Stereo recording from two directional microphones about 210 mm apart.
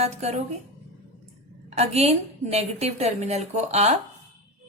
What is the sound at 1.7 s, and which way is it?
A woman's voice, 30° right (ahead or behind).